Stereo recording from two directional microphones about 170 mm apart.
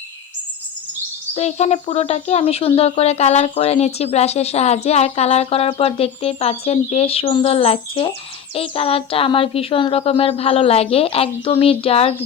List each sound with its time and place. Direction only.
1.4 s speech: 40° left (ahead or behind)